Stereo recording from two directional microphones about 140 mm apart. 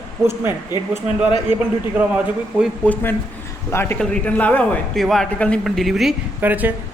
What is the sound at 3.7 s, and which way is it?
A man's voice, 15° left (ahead or behind).